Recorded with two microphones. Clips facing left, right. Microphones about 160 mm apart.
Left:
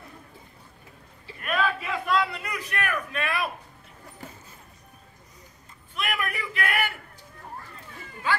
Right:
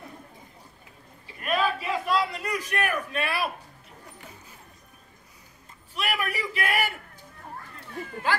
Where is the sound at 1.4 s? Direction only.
35° right (ahead or behind).